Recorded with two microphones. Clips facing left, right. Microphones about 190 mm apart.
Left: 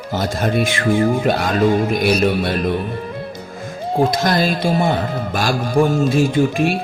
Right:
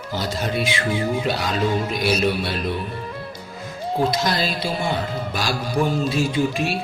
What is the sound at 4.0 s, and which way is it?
Speech, 50° left (ahead or behind).